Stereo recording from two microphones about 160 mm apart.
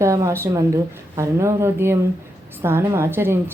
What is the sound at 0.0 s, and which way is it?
A woman's voice, 20° right (ahead or behind).